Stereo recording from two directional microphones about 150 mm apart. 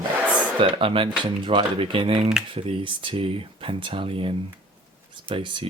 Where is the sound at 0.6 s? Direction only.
35° right (ahead or behind).